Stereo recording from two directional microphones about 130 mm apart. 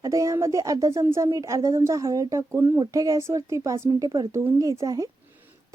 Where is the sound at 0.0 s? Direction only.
25° right (ahead or behind).